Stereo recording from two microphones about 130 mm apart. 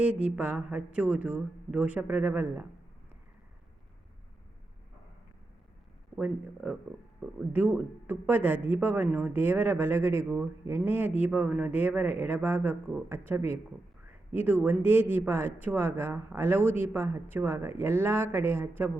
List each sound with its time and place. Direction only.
0.0 s speech: 10° right (ahead or behind)
6.1 s speech: 10° right (ahead or behind)